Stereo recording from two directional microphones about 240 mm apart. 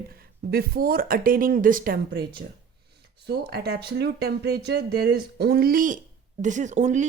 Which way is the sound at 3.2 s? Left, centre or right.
Right.